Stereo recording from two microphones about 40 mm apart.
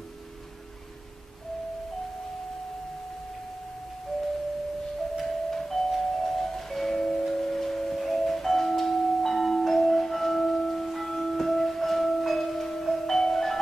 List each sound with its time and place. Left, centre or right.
5.2 s music: centre